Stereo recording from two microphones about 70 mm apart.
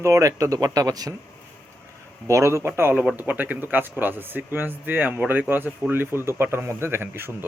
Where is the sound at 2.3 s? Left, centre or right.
Right.